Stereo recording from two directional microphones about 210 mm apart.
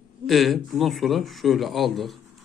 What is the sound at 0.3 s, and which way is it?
Speech, centre (ahead or behind).